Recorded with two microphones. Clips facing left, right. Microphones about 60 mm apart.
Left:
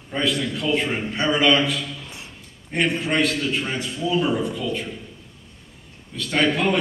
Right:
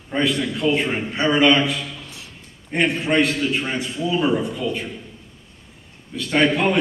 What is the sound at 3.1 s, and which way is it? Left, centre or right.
A man's voice, centre.